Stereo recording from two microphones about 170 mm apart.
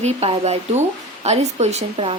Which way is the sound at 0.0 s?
40° right (ahead or behind).